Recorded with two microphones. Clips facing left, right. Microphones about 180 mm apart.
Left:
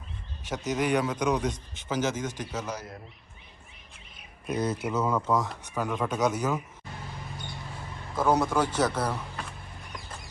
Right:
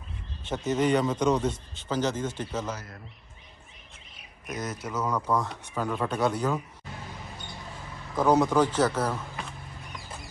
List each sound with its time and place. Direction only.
0.5 s a man's voice: centre (ahead or behind)
4.4 s speech: 30° left (ahead or behind)
4.9 s a man's voice: 5° left (ahead or behind)
5.9 s speech: centre (ahead or behind)
8.2 s speech: centre (ahead or behind)
8.6 s a man's voice: 15° left (ahead or behind)